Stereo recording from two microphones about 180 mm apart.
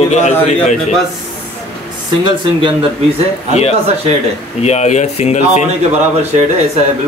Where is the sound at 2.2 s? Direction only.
30° right (ahead or behind).